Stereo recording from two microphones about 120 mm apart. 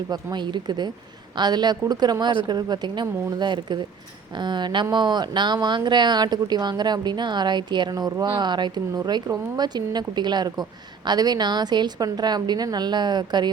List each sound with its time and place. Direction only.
0.1 s a woman's voice: 35° right (ahead or behind)